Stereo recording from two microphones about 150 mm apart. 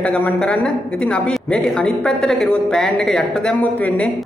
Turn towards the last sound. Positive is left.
turn(degrees=10)  # may be behind; listen again after turning